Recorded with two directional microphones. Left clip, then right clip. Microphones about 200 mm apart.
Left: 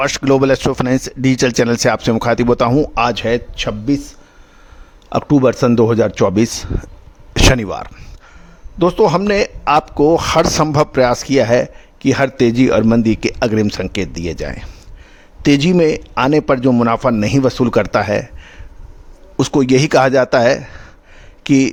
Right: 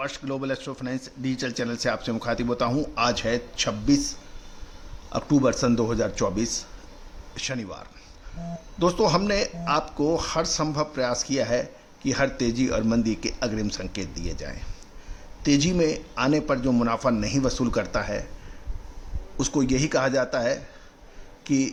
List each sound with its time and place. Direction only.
0.0 s speech: 55° left (ahead or behind)
19.4 s speech: 45° left (ahead or behind)